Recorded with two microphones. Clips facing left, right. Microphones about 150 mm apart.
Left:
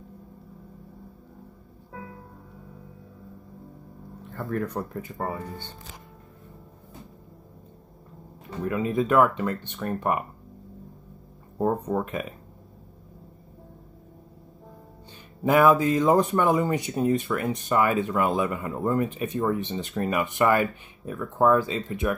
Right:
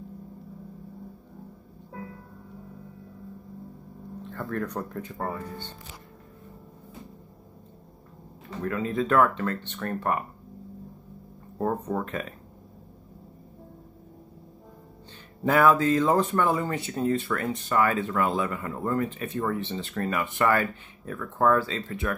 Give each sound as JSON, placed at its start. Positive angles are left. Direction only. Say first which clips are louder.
{"t": 4.3, "sound": "speech", "louder": "left 2 dB", "side_deg": 5}
{"t": 8.6, "sound": "speech", "louder": "left 2 dB", "side_deg": 15}
{"t": 11.5, "sound": "speech", "louder": "left 3 dB", "side_deg": 10}
{"t": 15.4, "sound": "speech", "louder": "left 2 dB", "side_deg": 15}